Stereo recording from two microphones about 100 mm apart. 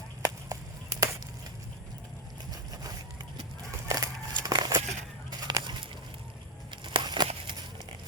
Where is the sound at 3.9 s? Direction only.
40° right (ahead or behind).